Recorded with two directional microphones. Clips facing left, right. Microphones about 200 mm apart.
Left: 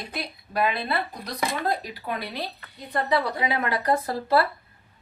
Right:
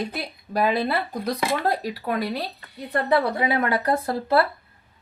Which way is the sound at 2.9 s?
55° right (ahead or behind).